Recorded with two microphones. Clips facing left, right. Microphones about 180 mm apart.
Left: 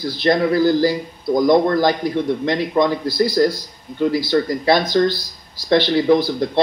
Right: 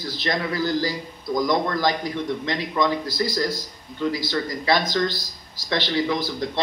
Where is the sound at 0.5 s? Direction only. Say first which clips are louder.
Left 9 dB; 55° left (ahead or behind).